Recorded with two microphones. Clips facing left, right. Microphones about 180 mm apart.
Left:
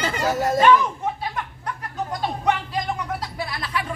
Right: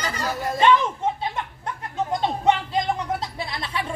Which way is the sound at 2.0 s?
25° right (ahead or behind).